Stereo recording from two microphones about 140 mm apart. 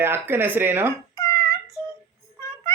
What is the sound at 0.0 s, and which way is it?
Speech, 15° right (ahead or behind).